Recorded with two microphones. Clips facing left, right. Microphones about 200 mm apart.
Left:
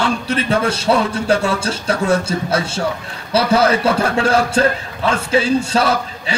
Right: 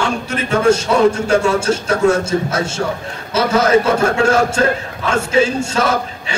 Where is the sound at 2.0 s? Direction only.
35° left (ahead or behind).